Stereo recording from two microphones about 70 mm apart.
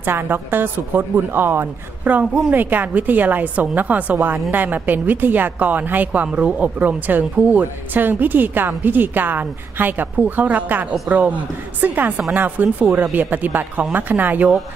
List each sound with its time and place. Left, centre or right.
0.0 s a woman's voice: right